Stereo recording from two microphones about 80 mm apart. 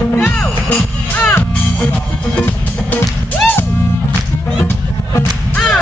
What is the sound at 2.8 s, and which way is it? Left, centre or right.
Music, left.